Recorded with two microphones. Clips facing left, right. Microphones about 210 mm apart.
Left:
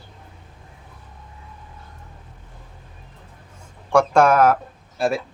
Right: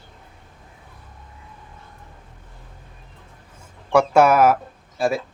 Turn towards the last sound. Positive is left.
turn(degrees=0)  # may be behind; listen again after turning